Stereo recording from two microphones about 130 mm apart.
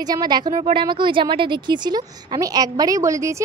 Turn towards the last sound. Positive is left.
turn(degrees=-25)  # may be behind; listen again after turning